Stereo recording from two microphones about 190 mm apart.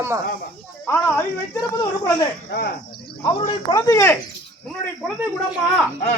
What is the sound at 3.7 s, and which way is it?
Speech, 20° left (ahead or behind).